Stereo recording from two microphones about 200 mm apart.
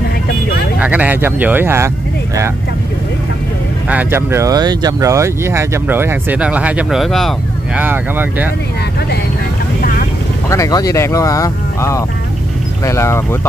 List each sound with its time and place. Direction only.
0.7 s speech: 5° right (ahead or behind)
3.9 s speech: 10° right (ahead or behind)
10.5 s speech: 15° left (ahead or behind)